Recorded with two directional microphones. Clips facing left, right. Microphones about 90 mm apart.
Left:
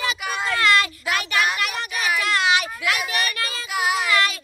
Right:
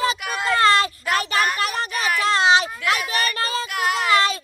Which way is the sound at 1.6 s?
35° right (ahead or behind).